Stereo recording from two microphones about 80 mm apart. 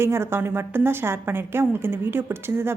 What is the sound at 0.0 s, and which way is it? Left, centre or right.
A woman's voice, right.